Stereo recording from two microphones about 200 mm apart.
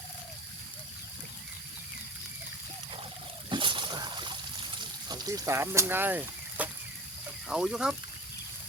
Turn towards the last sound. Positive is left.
turn(degrees=-5)  # may be behind; listen again after turning